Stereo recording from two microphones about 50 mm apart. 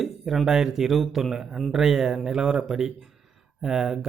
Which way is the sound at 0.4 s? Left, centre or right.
Centre.